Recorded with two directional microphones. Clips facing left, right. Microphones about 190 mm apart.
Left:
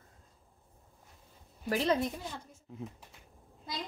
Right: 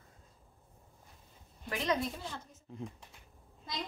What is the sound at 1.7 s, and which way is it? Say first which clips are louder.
Speech: left 4 dB; 30° left (ahead or behind).